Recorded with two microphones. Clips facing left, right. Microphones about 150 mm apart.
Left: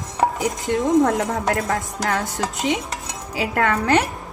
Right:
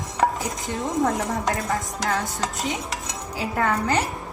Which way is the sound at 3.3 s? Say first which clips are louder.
Left 3 dB; 75° left (ahead or behind).